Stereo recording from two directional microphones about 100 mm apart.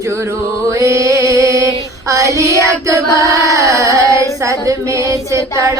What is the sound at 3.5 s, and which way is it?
Female singing, 35° right (ahead or behind).